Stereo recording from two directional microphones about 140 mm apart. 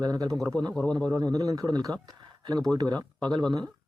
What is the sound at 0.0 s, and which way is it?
Speech, 25° right (ahead or behind).